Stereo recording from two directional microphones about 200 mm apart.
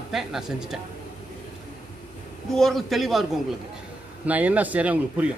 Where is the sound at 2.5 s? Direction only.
Centre (ahead or behind).